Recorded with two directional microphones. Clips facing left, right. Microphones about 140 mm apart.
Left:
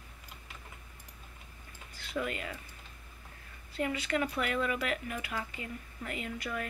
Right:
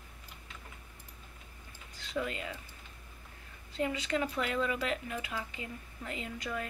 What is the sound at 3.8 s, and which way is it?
Speech, 25° right (ahead or behind).